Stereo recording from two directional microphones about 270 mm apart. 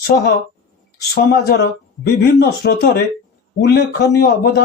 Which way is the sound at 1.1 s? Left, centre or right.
Left.